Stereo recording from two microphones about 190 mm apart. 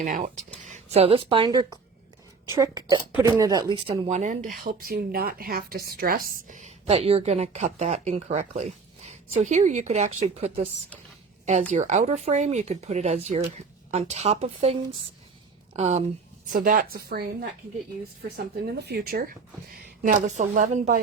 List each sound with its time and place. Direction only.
0.0 s a woman's voice: 40° right (ahead or behind); by 1.8 s 20° right (ahead or behind)
3.2 s speech: 20° right (ahead or behind); by 4.5 s 40° right (ahead or behind)
4.6 s a woman's voice: 50° right (ahead or behind); by 10.7 s 30° right (ahead or behind)
11.7 s a woman's voice: 40° right (ahead or behind)
16.5 s speech: 50° right (ahead or behind)
18.3 s a woman's voice: 55° right (ahead or behind); by 21.0 s 40° right (ahead or behind)